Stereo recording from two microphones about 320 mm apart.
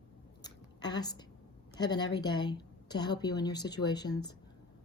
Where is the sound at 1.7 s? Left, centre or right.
Centre.